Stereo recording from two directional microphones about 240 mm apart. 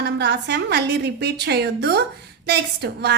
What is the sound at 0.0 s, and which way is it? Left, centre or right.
A woman's voice, right.